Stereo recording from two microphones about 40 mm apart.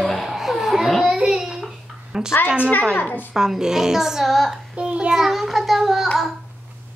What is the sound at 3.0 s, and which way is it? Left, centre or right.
Speech, left.